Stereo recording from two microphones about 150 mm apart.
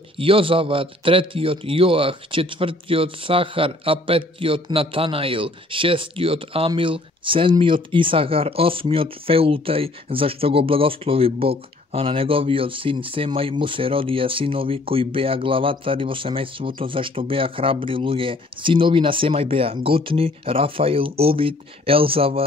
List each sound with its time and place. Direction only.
0.2 s speech: 35° right (ahead or behind)